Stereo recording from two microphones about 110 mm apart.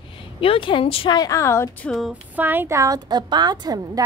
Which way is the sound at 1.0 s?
35° left (ahead or behind).